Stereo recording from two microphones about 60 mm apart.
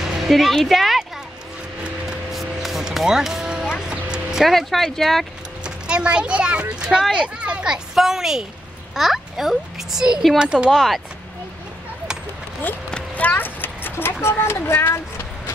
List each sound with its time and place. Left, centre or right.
0.0 s speech: centre
2.0 s music: centre
3.8 s a sound: centre
5.6 s a child's voice: centre
10.7 s speech: centre
13.1 s a sound: left
14.2 s speech: left